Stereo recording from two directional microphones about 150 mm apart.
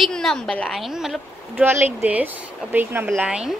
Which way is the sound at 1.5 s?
15° right (ahead or behind).